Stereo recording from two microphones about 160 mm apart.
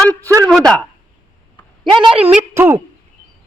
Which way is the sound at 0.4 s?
5° left (ahead or behind).